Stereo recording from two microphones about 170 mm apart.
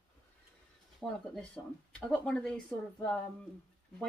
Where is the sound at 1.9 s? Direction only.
5° left (ahead or behind).